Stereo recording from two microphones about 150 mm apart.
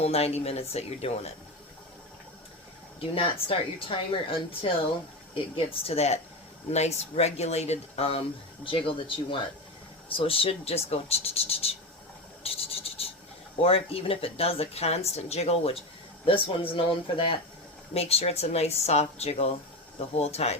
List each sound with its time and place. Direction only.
0.0 s speech: 45° left (ahead or behind)
3.0 s speech: 40° left (ahead or behind)
12.4 s scratch: 40° left (ahead or behind)
13.6 s speech: 40° left (ahead or behind)